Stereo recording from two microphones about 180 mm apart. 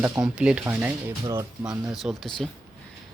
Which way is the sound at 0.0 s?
5° right (ahead or behind).